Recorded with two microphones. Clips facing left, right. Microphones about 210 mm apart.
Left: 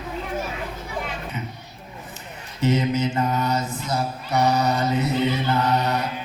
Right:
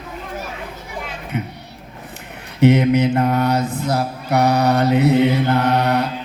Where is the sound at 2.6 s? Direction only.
65° right (ahead or behind).